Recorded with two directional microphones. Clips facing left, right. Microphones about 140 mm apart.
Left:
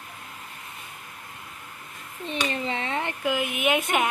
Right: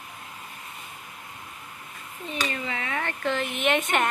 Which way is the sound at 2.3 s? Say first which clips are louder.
Left 3 dB; 30° left (ahead or behind).